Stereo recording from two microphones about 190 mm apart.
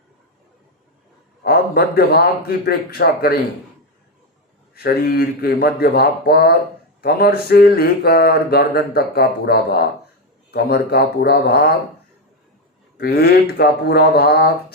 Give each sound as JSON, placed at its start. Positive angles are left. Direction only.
{"t": 1.5, "sound": "speech", "side_deg": 55}
{"t": 4.7, "sound": "speech", "side_deg": 55}
{"t": 13.0, "sound": "speech", "side_deg": 55}